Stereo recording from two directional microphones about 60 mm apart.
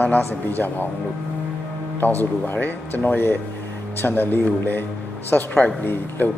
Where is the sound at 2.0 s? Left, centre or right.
Left.